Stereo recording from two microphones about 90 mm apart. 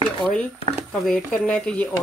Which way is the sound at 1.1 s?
10° left (ahead or behind).